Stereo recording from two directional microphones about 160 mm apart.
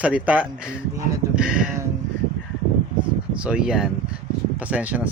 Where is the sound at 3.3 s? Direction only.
5° right (ahead or behind).